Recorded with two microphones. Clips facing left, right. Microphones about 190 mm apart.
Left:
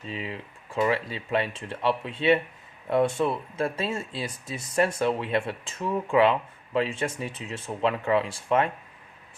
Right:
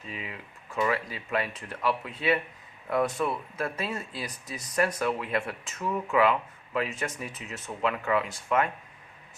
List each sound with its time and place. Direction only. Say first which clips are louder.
0.1 s speech: left 5 dB; 30° left (ahead or behind)